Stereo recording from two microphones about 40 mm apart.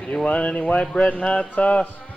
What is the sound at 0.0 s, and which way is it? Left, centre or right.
Speech, left.